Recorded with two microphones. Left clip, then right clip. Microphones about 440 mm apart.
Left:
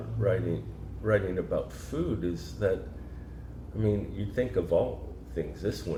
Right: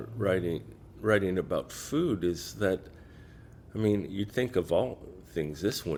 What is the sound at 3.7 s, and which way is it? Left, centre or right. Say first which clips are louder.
Speech: right 2 dB; right.